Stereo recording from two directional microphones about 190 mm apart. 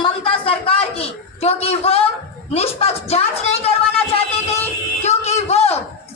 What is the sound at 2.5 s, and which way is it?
Speech, 35° left (ahead or behind).